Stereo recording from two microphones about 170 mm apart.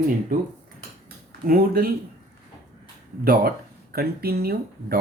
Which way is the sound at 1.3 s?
60° right (ahead or behind).